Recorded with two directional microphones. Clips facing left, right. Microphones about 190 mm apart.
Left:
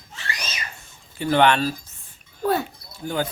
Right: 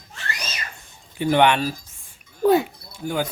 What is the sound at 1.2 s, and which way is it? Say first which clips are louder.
Speech: right 1 dB; 15° right (ahead or behind).